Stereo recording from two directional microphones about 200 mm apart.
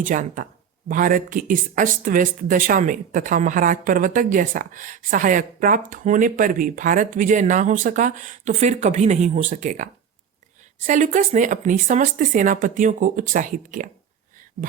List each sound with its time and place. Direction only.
0.0 s speech: 40° right (ahead or behind)